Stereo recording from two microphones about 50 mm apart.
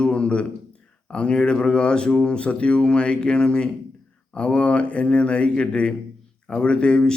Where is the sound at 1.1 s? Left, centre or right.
Centre.